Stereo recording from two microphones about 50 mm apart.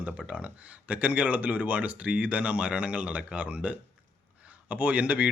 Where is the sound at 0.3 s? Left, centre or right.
Right.